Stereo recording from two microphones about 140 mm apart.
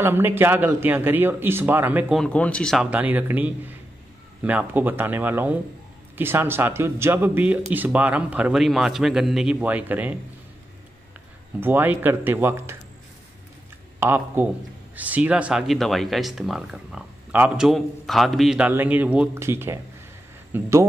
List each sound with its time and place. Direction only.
0.0 s a man's voice: 15° right (ahead or behind)
2.1 s speech: 10° left (ahead or behind)
2.8 s a man's voice: 10° right (ahead or behind)
11.6 s a man's voice: 15° right (ahead or behind)
13.9 s speech: 15° right (ahead or behind)
18.7 s a man's voice: 15° right (ahead or behind)